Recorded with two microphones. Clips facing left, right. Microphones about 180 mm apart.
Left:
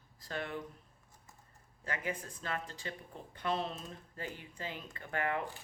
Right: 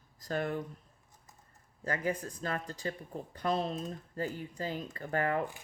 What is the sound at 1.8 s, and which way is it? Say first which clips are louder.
Speech: right 6 dB; 40° right (ahead or behind).